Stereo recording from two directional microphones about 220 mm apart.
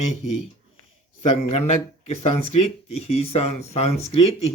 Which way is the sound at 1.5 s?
30° left (ahead or behind).